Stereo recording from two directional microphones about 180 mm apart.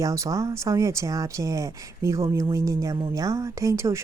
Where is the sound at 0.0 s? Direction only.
20° right (ahead or behind).